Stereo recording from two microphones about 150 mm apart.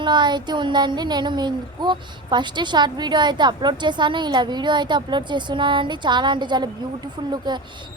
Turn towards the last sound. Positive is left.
turn(degrees=-30)  # may be behind; listen again after turning